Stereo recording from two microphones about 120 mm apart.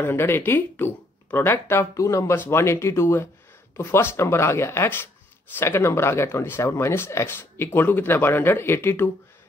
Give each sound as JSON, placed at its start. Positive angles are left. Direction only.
{"t": 0.0, "sound": "speech", "side_deg": 20}